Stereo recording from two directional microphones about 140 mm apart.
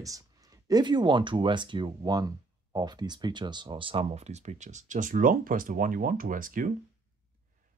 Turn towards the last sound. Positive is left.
turn(degrees=-75)  # may be behind; listen again after turning